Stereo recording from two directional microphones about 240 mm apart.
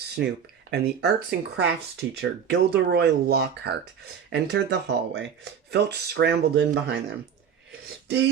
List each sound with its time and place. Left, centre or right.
0.2 s speech: right